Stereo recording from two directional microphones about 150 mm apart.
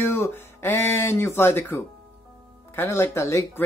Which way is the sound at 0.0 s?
20° left (ahead or behind).